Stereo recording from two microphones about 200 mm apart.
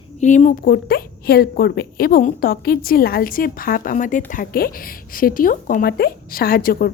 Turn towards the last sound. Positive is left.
turn(degrees=50)  # may be behind; listen again after turning